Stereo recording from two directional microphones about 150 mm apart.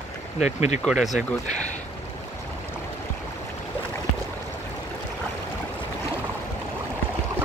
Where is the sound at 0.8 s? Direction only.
Centre (ahead or behind).